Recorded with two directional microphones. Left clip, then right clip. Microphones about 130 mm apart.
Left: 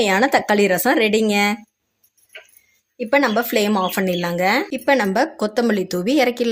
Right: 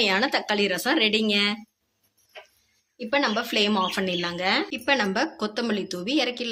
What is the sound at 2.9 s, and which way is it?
Speech, 65° left (ahead or behind).